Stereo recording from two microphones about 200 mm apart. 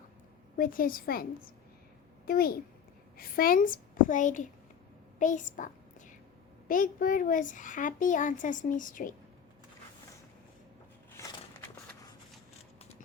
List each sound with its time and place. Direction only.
0.5 s a child's voice: 45° left (ahead or behind)
5.2 s a sound: 40° left (ahead or behind)
6.7 s a woman's voice: 40° left (ahead or behind)